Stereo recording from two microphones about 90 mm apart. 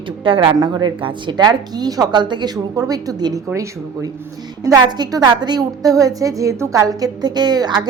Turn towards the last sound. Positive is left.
turn(degrees=-50)  # may be behind; listen again after turning